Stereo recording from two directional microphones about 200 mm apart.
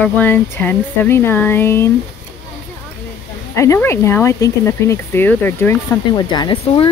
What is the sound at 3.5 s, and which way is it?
Speech, 15° left (ahead or behind).